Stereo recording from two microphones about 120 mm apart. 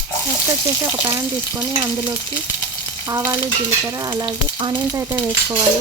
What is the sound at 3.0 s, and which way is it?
Frying, 30° right (ahead or behind).